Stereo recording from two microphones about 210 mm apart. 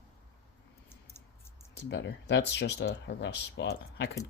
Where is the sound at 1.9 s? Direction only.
55° left (ahead or behind).